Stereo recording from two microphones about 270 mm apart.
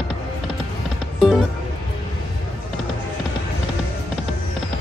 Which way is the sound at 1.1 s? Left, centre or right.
Centre.